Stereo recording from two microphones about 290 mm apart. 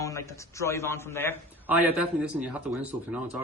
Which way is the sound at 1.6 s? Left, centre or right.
Centre.